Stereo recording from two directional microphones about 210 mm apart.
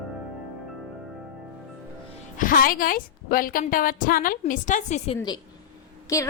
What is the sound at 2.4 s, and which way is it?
A woman's voice, 40° left (ahead or behind).